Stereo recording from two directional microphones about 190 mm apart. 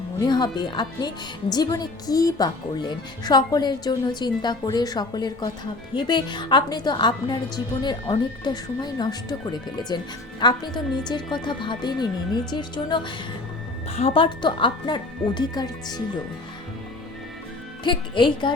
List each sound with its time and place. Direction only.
0.3 s speech: 20° left (ahead or behind)
17.8 s speech: 25° left (ahead or behind)